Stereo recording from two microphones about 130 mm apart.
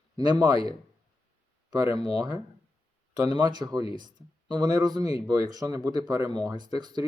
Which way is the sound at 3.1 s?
35° right (ahead or behind).